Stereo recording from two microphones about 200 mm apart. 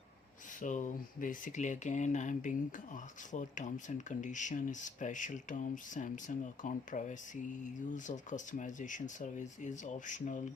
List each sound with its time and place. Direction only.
0.6 s speech: 40° left (ahead or behind)